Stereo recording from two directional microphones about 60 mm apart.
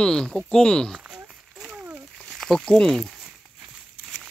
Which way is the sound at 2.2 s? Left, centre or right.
Centre.